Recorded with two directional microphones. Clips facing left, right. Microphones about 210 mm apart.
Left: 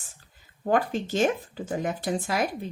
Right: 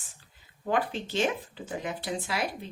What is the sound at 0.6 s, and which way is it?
Speech, 45° left (ahead or behind).